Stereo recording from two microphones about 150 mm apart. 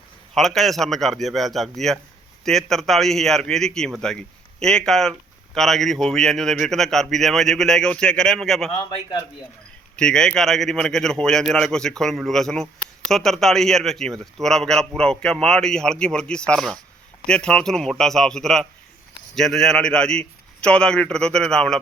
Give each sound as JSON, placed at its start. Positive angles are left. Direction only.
{"t": 0.3, "sound": "a man's voice", "side_deg": 0}
{"t": 8.7, "sound": "a man's voice", "side_deg": 30}
{"t": 9.9, "sound": "a man's voice", "side_deg": 5}